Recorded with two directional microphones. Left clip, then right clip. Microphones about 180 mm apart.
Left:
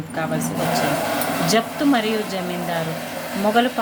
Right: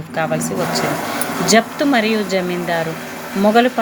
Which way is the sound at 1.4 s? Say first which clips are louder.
Right 7 dB; 35° right (ahead or behind).